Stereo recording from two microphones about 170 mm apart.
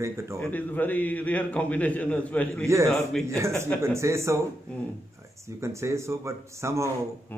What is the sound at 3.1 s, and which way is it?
Speech, centre (ahead or behind).